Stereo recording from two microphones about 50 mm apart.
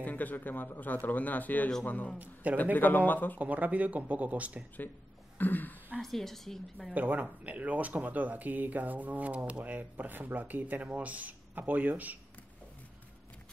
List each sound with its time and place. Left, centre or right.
0.0 s speech: left
3.3 s speech: right
5.4 s speech: left
5.9 s a woman's voice: centre
6.9 s speech: right